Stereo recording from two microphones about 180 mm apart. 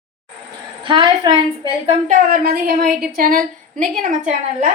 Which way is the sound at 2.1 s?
55° right (ahead or behind).